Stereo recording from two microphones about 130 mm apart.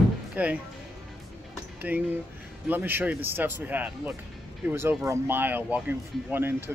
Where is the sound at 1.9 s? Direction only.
10° right (ahead or behind).